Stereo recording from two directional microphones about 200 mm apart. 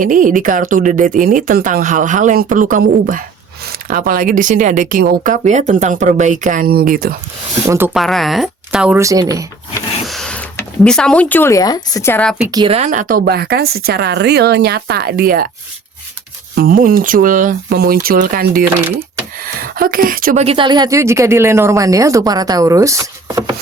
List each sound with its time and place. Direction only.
0.0 s speech: 40° right (ahead or behind)
7.9 s speech: centre (ahead or behind); by 9.5 s 15° right (ahead or behind)
10.1 s speech: 5° left (ahead or behind)
12.4 s a woman's voice: 20° right (ahead or behind)
12.7 s speech: 40° right (ahead or behind)
16.6 s speech: 45° right (ahead or behind)
18.8 s speech: 10° right (ahead or behind)
19.4 s speech: 45° right (ahead or behind)
20.4 s speech: 25° right (ahead or behind)